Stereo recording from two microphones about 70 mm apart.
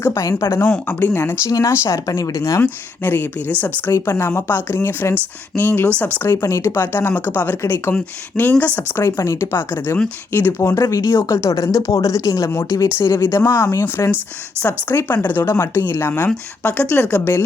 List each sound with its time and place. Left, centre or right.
0.0 s speech: left
0.9 s speech: left
1.5 s speech: left
1.7 s speech: left
3.0 s speech: left
6.2 s speech: left
9.0 s speech: left
13.0 s speech: left
14.0 s speech: left
14.6 s speech: left
15.4 s speech: left